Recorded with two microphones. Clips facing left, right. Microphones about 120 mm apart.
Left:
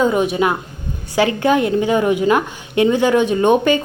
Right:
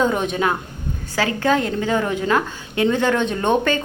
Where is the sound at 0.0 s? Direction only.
5° left (ahead or behind).